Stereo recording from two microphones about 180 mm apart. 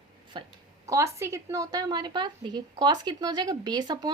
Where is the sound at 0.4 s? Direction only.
25° right (ahead or behind).